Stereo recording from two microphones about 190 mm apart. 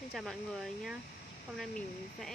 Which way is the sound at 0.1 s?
Centre (ahead or behind).